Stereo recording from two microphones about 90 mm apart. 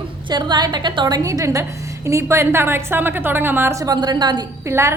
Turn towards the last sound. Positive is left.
turn(degrees=-30)  # may be behind; listen again after turning